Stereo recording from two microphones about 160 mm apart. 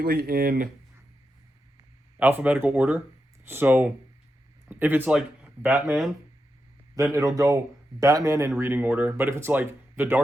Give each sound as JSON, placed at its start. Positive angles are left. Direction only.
{"t": 0.0, "sound": "speech", "side_deg": -75}
{"t": 2.1, "sound": "speech", "side_deg": -10}